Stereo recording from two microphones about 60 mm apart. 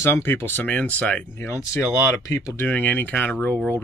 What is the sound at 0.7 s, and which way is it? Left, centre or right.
Speech, left.